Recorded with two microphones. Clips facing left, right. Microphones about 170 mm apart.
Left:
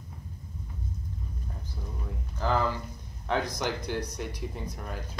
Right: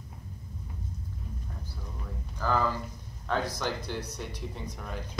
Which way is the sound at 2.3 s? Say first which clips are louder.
Left 1 dB; 20° left (ahead or behind).